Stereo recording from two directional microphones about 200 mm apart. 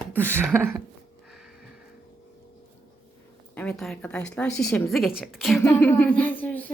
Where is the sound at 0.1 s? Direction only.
10° right (ahead or behind).